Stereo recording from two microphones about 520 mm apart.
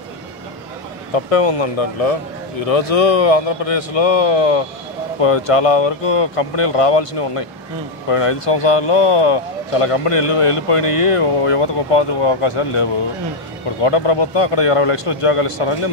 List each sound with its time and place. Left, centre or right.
1.1 s speech: left
13.8 s speech: left